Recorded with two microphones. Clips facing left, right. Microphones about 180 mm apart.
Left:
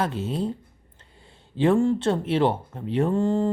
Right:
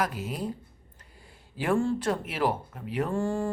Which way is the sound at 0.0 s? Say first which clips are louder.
Left 4 dB; 25° left (ahead or behind).